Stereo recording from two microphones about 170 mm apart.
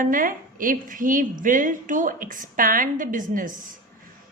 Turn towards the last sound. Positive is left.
turn(degrees=-50)  # may be behind; listen again after turning